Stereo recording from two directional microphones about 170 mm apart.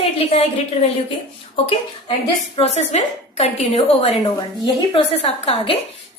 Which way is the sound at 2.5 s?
40° left (ahead or behind).